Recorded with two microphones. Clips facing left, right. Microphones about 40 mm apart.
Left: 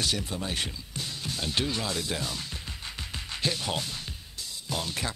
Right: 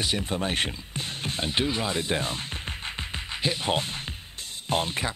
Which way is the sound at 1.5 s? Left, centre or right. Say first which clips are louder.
Right 3 dB; right.